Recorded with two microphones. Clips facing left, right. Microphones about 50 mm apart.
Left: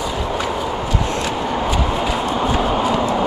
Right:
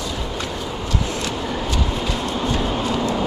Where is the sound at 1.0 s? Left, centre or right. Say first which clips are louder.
Left 4 dB; centre.